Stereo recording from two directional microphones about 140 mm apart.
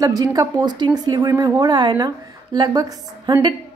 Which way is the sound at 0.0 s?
25° right (ahead or behind).